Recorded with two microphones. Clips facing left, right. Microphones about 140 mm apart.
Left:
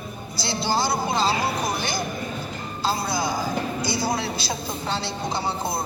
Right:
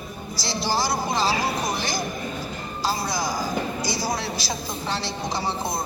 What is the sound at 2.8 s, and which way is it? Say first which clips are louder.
Speech: left 1 dB; 25° left (ahead or behind).